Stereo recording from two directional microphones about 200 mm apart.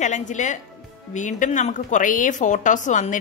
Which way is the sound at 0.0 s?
35° left (ahead or behind).